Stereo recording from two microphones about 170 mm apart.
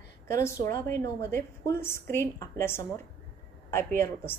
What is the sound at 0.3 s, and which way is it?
A woman's voice, 15° left (ahead or behind).